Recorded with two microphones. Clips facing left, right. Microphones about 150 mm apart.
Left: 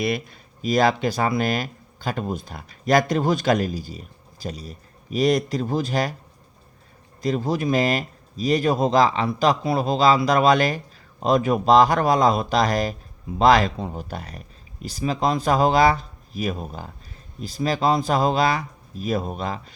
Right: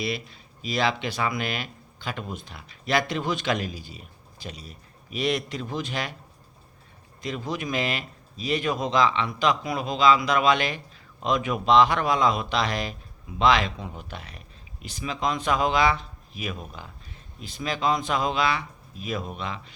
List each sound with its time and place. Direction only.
0.0 s speech: 50° left (ahead or behind)
7.2 s speech: 40° left (ahead or behind)